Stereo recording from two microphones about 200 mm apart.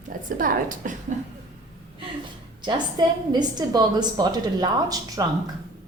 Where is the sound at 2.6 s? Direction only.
20° right (ahead or behind).